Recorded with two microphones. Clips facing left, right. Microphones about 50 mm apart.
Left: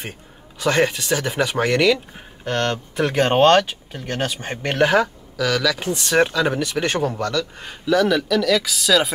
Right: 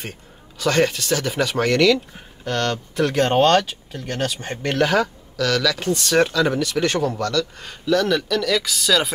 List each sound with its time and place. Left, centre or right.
0.6 s speech: centre